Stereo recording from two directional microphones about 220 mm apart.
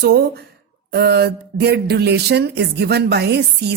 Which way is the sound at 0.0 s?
45° right (ahead or behind).